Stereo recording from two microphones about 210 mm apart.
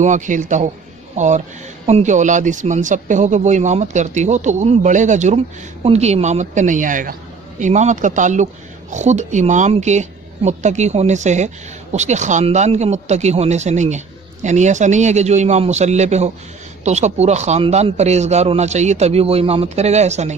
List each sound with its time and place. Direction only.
0.0 s speech: 35° right (ahead or behind)